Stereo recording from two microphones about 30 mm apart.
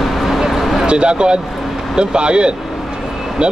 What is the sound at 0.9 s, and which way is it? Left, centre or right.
Speech, right.